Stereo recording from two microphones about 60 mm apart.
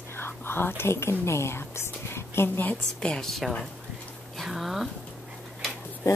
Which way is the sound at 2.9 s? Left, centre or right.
Centre.